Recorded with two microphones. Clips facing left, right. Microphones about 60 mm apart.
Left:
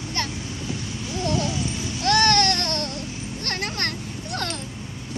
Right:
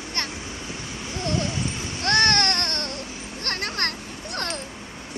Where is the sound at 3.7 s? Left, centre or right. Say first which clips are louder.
Even; right.